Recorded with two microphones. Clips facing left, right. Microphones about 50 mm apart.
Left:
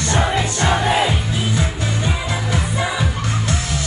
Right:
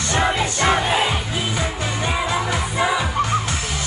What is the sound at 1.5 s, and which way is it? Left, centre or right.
Music, right.